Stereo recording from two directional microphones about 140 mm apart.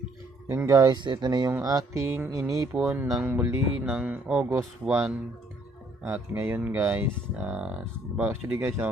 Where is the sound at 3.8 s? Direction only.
5° right (ahead or behind).